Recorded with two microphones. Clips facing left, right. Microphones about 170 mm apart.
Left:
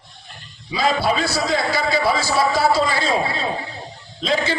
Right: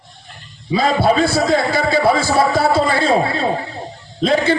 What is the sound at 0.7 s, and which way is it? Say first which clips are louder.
A man's voice: right 5 dB; 55° right (ahead or behind).